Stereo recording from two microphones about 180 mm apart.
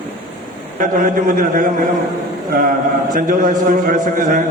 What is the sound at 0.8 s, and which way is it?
Speech, 50° right (ahead or behind).